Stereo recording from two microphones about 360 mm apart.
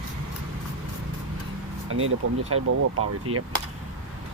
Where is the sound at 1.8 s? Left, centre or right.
Right.